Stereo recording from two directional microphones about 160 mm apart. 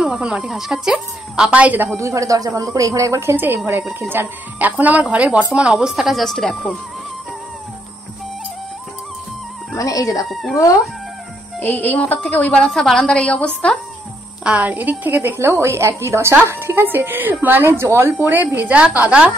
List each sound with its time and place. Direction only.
0.0 s a woman's voice: 5° right (ahead or behind)
9.8 s speech: 20° left (ahead or behind)
10.3 s a woman's voice: centre (ahead or behind)
11.6 s a woman's voice: 10° left (ahead or behind)
14.4 s a woman's voice: 10° right (ahead or behind)